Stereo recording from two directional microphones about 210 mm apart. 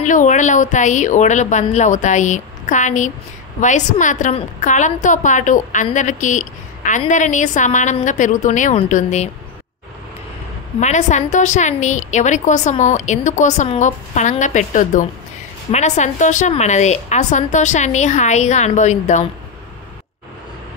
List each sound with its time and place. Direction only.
0.0 s a woman's voice: 35° left (ahead or behind)
10.8 s a woman's voice: 35° left (ahead or behind)